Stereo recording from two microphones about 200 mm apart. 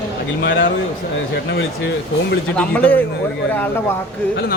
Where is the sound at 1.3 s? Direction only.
55° left (ahead or behind).